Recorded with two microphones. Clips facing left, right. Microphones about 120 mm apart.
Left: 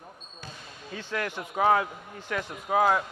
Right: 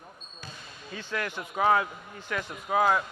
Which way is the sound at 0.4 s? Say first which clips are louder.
Left 1 dB; 50° left (ahead or behind).